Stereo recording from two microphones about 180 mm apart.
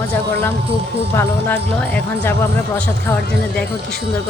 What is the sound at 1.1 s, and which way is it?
Speech, 15° left (ahead or behind).